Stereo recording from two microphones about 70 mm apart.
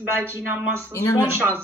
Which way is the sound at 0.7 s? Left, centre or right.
Left.